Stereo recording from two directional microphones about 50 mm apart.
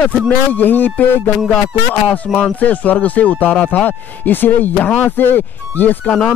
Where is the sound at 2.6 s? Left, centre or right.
Left.